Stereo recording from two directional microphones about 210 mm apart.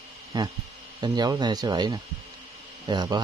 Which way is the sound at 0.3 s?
20° right (ahead or behind).